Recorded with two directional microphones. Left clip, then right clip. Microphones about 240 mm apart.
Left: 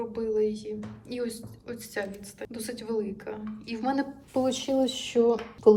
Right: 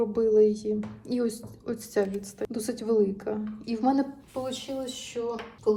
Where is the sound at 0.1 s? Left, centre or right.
Centre.